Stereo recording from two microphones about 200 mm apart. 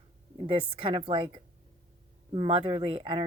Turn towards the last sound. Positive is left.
turn(degrees=-25)  # may be behind; listen again after turning